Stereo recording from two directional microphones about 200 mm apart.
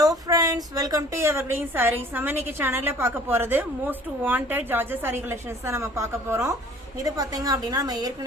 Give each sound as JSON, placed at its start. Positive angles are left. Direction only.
{"t": 0.0, "sound": "a woman's voice", "side_deg": -15}